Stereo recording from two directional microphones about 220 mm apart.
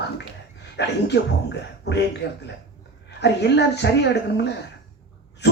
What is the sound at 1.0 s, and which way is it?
Speech, 50° left (ahead or behind).